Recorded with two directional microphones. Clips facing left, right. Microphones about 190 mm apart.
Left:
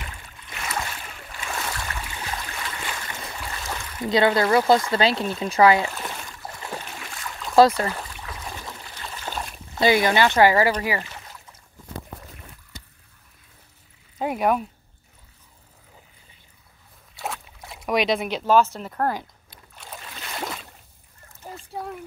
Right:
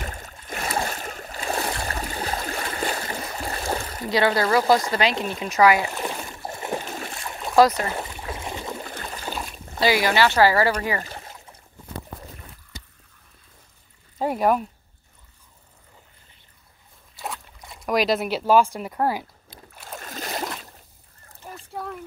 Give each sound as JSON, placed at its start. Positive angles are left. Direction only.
{"t": 0.0, "sound": "boat", "side_deg": -45}
{"t": 4.0, "sound": "speech", "side_deg": 20}
{"t": 5.9, "sound": "boat", "side_deg": -20}
{"t": 7.5, "sound": "speech", "side_deg": 30}
{"t": 7.8, "sound": "boat", "side_deg": -25}
{"t": 8.8, "sound": "trickle", "side_deg": -50}
{"t": 9.8, "sound": "speech", "side_deg": 20}
{"t": 11.0, "sound": "a sound", "side_deg": -40}
{"t": 14.1, "sound": "speech", "side_deg": 0}
{"t": 17.1, "sound": "boat", "side_deg": 0}
{"t": 17.5, "sound": "speech", "side_deg": 0}
{"t": 20.0, "sound": "boat", "side_deg": -40}
{"t": 21.5, "sound": "trickle", "side_deg": 25}